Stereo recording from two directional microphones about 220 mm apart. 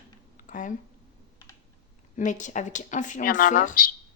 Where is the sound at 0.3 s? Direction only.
35° left (ahead or behind).